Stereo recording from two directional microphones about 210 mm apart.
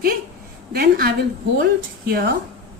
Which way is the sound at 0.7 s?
50° right (ahead or behind).